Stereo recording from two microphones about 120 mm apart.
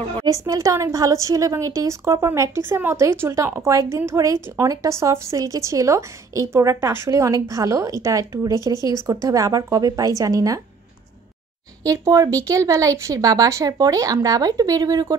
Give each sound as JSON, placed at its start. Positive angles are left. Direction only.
{"t": 0.3, "sound": "a woman's voice", "side_deg": -30}
{"t": 11.8, "sound": "a woman's voice", "side_deg": -30}